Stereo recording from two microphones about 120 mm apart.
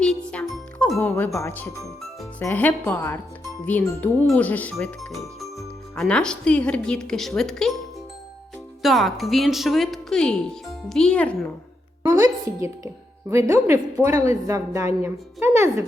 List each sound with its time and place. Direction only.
0.0 s music: 5° left (ahead or behind)
0.9 s a woman's voice: 15° left (ahead or behind)
4.9 s a woman's voice: centre (ahead or behind)
8.8 s speech: centre (ahead or behind)
12.5 s a woman's voice: 25° right (ahead or behind)